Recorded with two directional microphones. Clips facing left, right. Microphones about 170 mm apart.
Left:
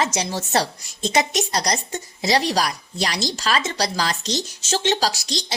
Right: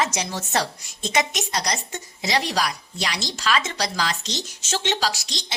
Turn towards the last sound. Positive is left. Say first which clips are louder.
# left 3 dB
turn(degrees=35)  # may be behind; listen again after turning